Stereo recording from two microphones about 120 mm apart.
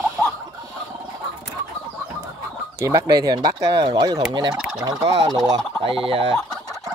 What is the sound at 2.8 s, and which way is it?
Speech, 25° right (ahead or behind).